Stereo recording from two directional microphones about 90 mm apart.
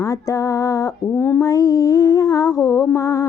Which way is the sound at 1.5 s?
40° left (ahead or behind).